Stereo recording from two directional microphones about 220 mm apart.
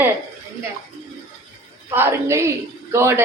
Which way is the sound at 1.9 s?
10° right (ahead or behind).